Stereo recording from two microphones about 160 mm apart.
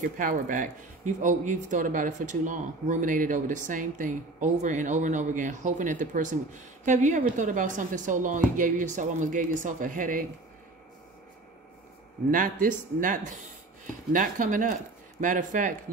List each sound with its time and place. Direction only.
0.2 s speech: 55° right (ahead or behind)
12.3 s speech: 55° right (ahead or behind)